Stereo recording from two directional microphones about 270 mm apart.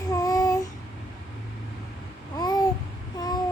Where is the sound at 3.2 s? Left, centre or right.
Centre.